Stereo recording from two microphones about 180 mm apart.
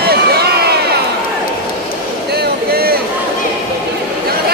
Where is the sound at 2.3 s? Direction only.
60° right (ahead or behind).